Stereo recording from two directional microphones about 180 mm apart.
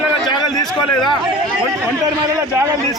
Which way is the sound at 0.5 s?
20° left (ahead or behind).